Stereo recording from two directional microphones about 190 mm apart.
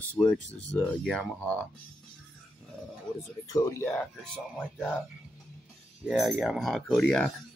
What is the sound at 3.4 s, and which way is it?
Speech, 15° left (ahead or behind).